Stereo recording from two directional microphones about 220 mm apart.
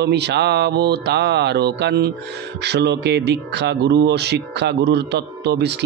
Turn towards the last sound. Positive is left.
turn(degrees=-50)  # may be behind; listen again after turning